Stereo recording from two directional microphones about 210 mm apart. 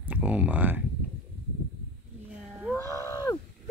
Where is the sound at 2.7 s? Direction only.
15° left (ahead or behind).